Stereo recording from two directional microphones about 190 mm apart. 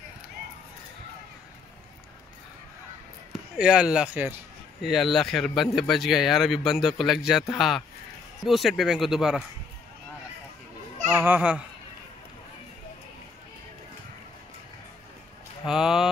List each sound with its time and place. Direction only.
3.5 s speech: 5° right (ahead or behind)
11.1 s speech: 10° right (ahead or behind)
15.6 s speech: centre (ahead or behind)